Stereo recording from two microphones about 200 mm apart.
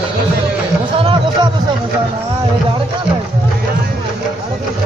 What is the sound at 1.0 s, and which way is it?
Music, 25° right (ahead or behind).